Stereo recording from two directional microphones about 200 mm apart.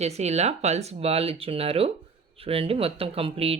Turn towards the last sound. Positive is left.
turn(degrees=-30)  # may be behind; listen again after turning